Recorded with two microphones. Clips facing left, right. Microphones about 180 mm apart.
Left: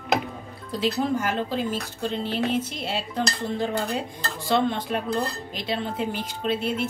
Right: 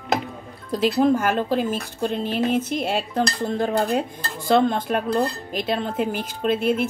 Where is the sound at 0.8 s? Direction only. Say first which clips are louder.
Right 6 dB; 50° right (ahead or behind).